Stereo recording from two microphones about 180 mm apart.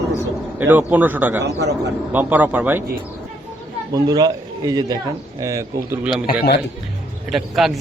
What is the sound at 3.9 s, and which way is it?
A man's voice, 20° right (ahead or behind).